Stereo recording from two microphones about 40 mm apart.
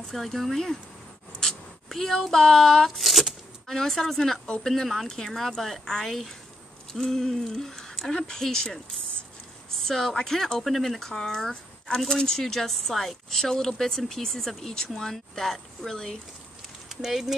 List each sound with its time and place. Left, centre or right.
0.1 s a woman's voice: centre
1.4 s a sound: centre
3.6 s a woman's voice: centre
6.9 s a sound: centre
8.1 s a woman's voice: left
9.8 s a woman's voice: centre
16.9 s speech: centre